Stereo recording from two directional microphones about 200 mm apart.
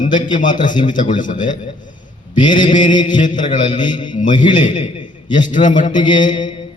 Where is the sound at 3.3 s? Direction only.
20° left (ahead or behind).